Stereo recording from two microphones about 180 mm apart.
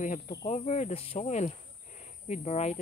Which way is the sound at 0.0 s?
40° left (ahead or behind).